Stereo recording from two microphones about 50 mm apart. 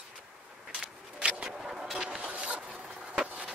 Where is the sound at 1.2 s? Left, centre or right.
Centre.